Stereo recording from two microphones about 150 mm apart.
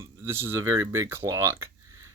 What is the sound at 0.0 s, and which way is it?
Speech, 15° right (ahead or behind).